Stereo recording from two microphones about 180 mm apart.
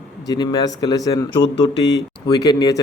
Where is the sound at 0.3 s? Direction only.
20° left (ahead or behind).